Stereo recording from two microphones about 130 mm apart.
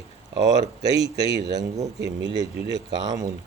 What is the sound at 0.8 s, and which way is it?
Speech, 50° left (ahead or behind).